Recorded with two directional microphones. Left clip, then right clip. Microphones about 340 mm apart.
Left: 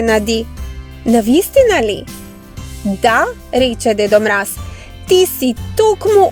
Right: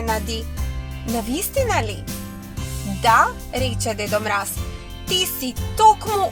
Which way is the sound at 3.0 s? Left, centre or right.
Left.